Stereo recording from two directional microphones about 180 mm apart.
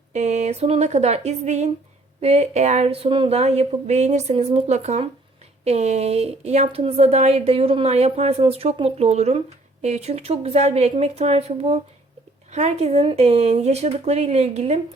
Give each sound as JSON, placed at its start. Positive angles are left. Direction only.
{"t": 0.1, "sound": "a woman's voice", "side_deg": -40}